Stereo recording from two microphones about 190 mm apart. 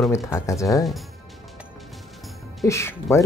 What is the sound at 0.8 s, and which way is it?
Speech, centre (ahead or behind).